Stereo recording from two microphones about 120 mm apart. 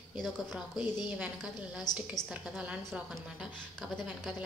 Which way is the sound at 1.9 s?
35° left (ahead or behind).